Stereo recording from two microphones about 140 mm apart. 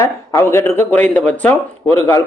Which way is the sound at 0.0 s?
20° left (ahead or behind).